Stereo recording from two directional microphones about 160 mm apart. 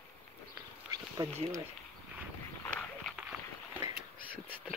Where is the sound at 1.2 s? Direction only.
35° right (ahead or behind).